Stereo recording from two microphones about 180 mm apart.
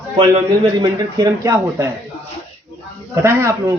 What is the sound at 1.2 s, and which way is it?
Speech, 15° right (ahead or behind).